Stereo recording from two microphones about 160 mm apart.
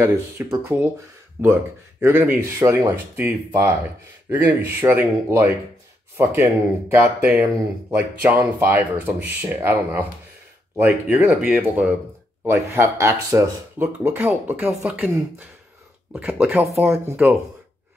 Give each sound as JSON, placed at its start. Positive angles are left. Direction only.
{"t": 0.0, "sound": "speech", "side_deg": -15}
{"t": 16.1, "sound": "speech", "side_deg": -10}